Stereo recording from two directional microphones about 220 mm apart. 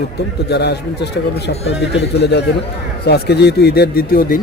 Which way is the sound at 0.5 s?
50° left (ahead or behind).